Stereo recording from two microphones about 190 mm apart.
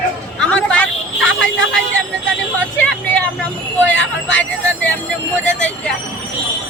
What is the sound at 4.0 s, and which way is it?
Speech, 75° left (ahead or behind).